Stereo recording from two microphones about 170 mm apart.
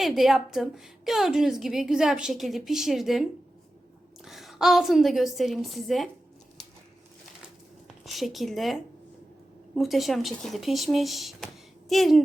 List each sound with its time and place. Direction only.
0.0 s a woman's voice: centre (ahead or behind)
4.3 s a woman's voice: centre (ahead or behind)
8.0 s a woman's voice: centre (ahead or behind)